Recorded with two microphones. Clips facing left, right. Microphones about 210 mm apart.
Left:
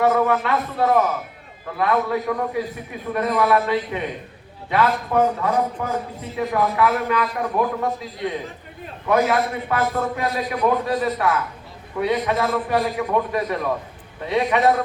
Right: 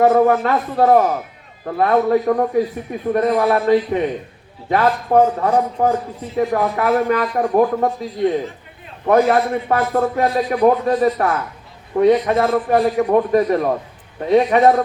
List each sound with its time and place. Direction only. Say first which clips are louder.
0.0 s a man's voice: right 5 dB; 40° right (ahead or behind)